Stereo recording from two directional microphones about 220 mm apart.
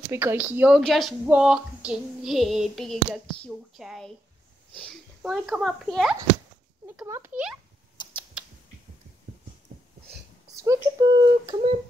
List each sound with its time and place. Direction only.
0.1 s speech: 10° right (ahead or behind)
8.0 s typing: 20° left (ahead or behind)
10.6 s speech: 15° right (ahead or behind)